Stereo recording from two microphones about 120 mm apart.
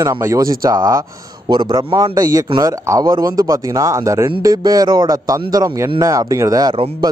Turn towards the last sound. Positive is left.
turn(degrees=-30)  # may be behind; listen again after turning